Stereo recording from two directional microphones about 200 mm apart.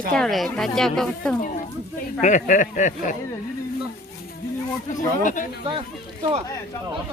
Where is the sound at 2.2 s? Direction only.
40° left (ahead or behind).